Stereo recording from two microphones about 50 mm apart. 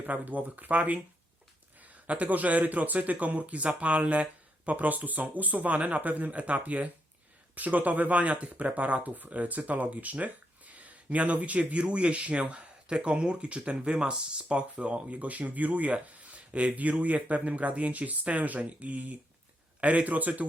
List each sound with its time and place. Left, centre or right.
0.0 s speech: right